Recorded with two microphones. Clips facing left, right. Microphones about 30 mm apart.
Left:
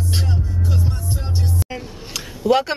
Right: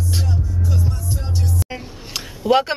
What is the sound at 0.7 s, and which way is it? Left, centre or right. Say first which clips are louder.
Music: even; left.